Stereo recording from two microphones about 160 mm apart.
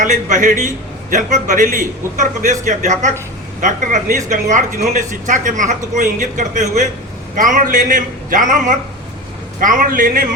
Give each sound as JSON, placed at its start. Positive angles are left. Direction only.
{"t": 0.0, "sound": "a man's voice", "side_deg": -50}